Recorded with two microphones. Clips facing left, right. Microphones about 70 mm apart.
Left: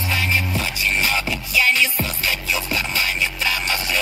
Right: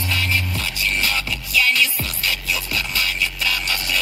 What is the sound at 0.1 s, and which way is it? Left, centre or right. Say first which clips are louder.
Music: left 2 dB; centre.